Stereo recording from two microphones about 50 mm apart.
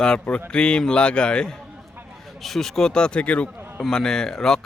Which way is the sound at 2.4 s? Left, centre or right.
Centre.